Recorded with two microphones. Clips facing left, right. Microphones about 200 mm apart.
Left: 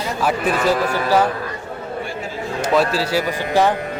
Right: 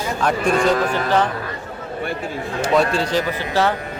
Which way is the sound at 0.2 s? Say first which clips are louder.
Right 1 dB; 5° left (ahead or behind).